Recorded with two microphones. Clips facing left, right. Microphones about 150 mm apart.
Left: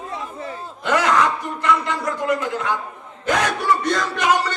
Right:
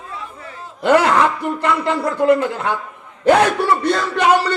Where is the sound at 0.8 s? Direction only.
30° right (ahead or behind).